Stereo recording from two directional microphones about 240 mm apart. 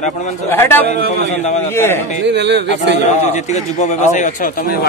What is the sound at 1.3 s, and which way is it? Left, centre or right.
Speech, left.